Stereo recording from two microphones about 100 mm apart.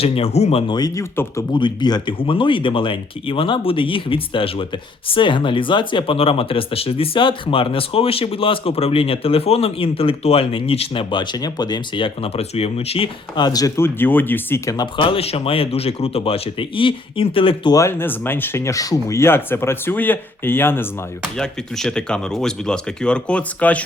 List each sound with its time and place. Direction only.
0.0 s speech: 85° left
0.9 s speech: 25° left (ahead or behind)
1.5 s speech: 50° left (ahead or behind); by 13.1 s 80° left
13.3 s speech: 45° left (ahead or behind)
13.7 s speech: 20° left (ahead or behind)
14.9 s speech: 65° left (ahead or behind)
17.7 s speech: 35° left (ahead or behind)
17.9 s speech: 20° left (ahead or behind)
21.3 s speech: 5° left (ahead or behind)